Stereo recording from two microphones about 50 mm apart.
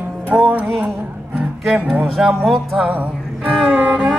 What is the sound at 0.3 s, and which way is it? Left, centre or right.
Music, right.